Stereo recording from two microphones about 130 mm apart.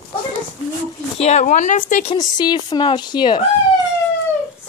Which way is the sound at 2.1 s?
35° left (ahead or behind).